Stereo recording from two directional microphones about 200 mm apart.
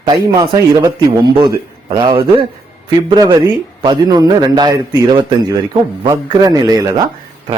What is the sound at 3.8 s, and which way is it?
Speech, 20° right (ahead or behind).